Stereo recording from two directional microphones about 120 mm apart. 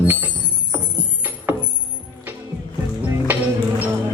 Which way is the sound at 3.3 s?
15° right (ahead or behind).